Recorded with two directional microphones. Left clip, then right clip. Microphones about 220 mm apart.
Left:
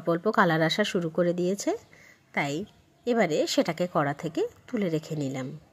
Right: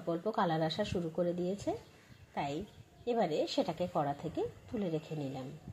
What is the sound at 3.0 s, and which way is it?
Speech, 25° left (ahead or behind).